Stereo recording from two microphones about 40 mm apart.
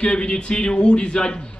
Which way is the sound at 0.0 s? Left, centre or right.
Left.